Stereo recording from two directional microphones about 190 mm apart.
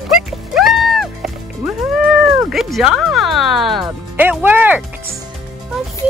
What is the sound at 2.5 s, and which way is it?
Music, centre (ahead or behind).